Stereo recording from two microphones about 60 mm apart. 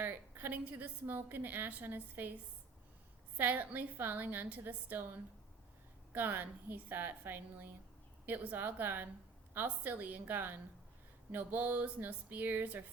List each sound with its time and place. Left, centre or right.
0.0 s a woman's voice: right
3.3 s a woman's voice: right